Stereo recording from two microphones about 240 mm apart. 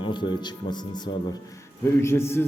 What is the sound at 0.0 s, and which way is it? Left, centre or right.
A man's voice, centre.